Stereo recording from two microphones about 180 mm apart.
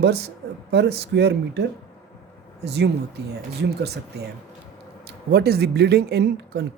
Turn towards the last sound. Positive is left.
turn(degrees=-65)  # may be behind; listen again after turning